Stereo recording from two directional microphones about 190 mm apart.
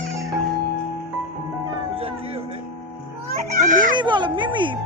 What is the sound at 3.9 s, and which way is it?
Music, 25° right (ahead or behind).